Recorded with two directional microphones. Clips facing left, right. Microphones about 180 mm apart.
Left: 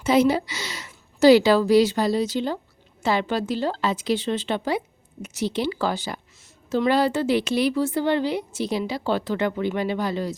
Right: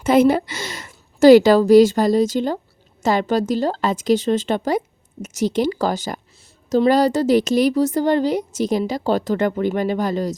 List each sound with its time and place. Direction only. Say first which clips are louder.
0.0 s a woman's voice: right 4 dB; 50° right (ahead or behind)